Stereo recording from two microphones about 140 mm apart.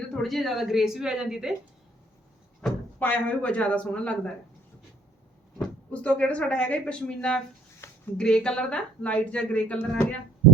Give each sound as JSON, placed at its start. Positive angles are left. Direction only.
{"t": 0.1, "sound": "a woman's voice", "side_deg": 0}
{"t": 2.6, "sound": "speech", "side_deg": 10}
{"t": 5.5, "sound": "speech", "side_deg": 5}
{"t": 7.8, "sound": "a sound", "side_deg": 20}
{"t": 8.2, "sound": "speech", "side_deg": 5}